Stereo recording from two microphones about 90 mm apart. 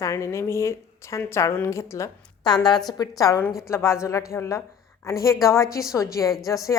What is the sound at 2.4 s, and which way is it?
Speech, 50° left (ahead or behind).